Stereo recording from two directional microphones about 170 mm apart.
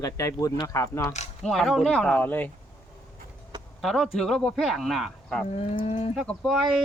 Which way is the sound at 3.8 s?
Centre (ahead or behind).